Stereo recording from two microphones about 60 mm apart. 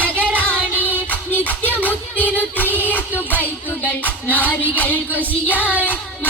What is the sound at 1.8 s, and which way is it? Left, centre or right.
Music, left.